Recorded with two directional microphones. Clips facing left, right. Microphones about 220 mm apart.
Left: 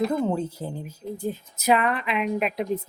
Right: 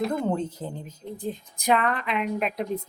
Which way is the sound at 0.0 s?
5° left (ahead or behind).